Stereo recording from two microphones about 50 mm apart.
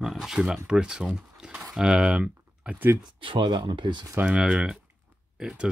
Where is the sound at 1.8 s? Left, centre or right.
Centre.